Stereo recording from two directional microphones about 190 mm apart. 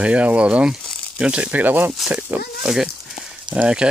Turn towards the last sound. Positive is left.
turn(degrees=-5)  # may be behind; listen again after turning